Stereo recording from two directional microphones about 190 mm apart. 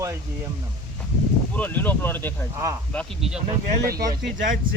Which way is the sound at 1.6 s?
10° left (ahead or behind).